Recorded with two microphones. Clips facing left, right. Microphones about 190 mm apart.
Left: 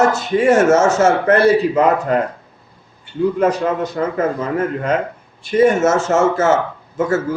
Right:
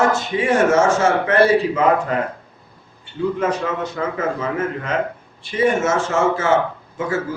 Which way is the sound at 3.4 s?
40° left (ahead or behind).